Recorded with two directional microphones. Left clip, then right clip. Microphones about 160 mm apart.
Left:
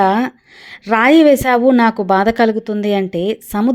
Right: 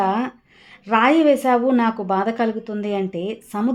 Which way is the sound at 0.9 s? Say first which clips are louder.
Left 6 dB; 35° left (ahead or behind).